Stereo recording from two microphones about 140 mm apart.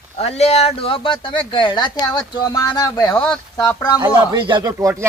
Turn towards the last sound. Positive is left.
turn(degrees=-25)  # may be behind; listen again after turning